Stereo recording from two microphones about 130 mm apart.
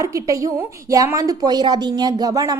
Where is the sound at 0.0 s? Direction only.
25° right (ahead or behind).